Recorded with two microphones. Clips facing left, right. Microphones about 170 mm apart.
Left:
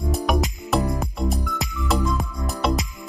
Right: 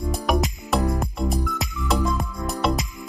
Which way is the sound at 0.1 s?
Centre (ahead or behind).